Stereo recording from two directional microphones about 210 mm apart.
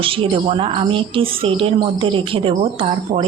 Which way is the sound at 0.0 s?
25° right (ahead or behind).